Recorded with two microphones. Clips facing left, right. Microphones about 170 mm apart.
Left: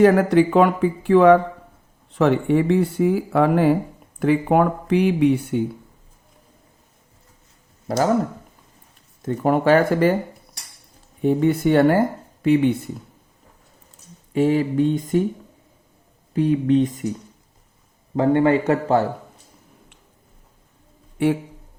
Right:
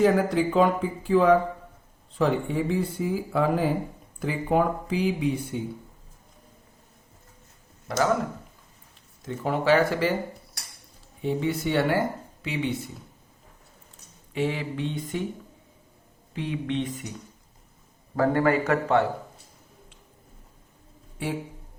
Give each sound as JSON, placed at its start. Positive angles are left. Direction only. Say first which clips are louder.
{"t": 0.0, "sound": "speech", "louder": "left 7 dB", "side_deg": 65}
{"t": 7.9, "sound": "speech", "louder": "left 5 dB", "side_deg": 40}
{"t": 9.2, "sound": "speech", "louder": "left 7 dB", "side_deg": 50}
{"t": 11.2, "sound": "speech", "louder": "left 8 dB", "side_deg": 50}
{"t": 14.3, "sound": "speech", "louder": "left 10 dB", "side_deg": 45}
{"t": 16.3, "sound": "speech", "louder": "left 12 dB", "side_deg": 40}
{"t": 18.2, "sound": "speech", "louder": "left 5 dB", "side_deg": 25}
{"t": 21.2, "sound": "speech", "louder": "left 11 dB", "side_deg": 65}